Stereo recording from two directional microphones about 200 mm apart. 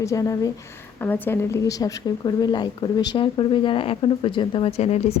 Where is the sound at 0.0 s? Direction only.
15° left (ahead or behind).